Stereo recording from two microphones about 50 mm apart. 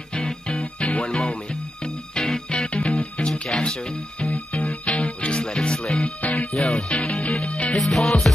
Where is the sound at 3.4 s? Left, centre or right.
Centre.